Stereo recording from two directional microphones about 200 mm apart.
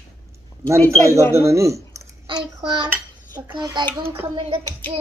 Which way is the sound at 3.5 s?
20° right (ahead or behind).